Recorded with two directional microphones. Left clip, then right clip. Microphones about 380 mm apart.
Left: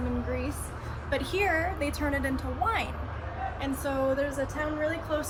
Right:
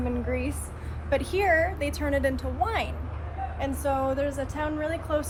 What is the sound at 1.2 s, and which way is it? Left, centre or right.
A woman's voice, centre.